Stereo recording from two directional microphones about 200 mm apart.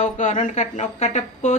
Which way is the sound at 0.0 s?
40° left (ahead or behind).